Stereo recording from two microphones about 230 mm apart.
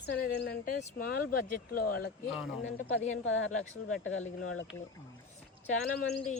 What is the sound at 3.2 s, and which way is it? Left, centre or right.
Speech, left.